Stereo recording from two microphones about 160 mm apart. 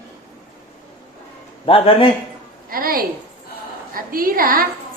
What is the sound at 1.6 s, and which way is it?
Speech, 35° left (ahead or behind).